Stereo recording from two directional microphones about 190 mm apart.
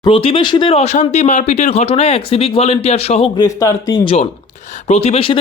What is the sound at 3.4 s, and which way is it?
Speech, 20° left (ahead or behind).